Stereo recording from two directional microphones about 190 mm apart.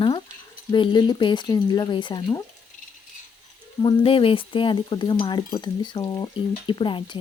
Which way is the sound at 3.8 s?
25° left (ahead or behind).